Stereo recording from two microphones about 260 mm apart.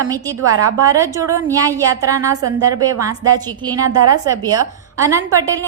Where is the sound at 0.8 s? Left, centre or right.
Centre.